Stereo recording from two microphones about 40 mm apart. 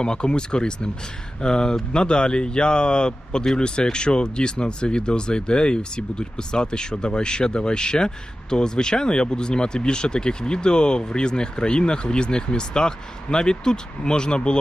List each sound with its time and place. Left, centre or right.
0.0 s speech: left